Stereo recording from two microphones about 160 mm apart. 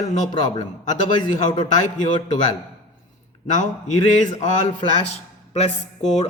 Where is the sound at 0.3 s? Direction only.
25° left (ahead or behind).